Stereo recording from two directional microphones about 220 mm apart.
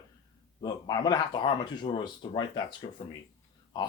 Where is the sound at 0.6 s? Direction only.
15° left (ahead or behind).